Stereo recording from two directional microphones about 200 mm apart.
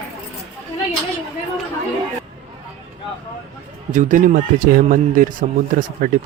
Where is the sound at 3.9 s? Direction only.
40° right (ahead or behind).